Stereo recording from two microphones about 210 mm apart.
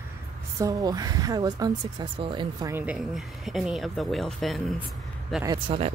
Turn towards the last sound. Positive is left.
turn(degrees=-25)  # may be behind; listen again after turning